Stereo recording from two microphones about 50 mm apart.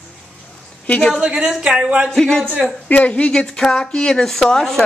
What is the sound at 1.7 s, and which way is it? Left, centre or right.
Speech, right.